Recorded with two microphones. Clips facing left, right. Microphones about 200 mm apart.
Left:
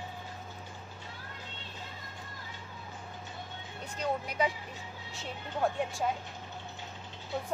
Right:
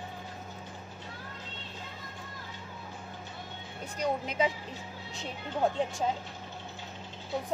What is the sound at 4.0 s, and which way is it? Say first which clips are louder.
A woman's voice: right 2 dB; 20° right (ahead or behind).